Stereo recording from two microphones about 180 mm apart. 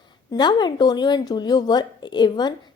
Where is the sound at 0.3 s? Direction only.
25° left (ahead or behind).